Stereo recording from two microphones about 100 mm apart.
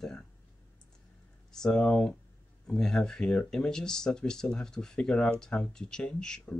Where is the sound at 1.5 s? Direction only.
5° left (ahead or behind).